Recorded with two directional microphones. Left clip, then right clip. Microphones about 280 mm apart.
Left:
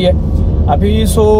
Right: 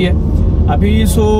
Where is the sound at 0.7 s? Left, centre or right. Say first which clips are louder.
Left 3 dB; centre.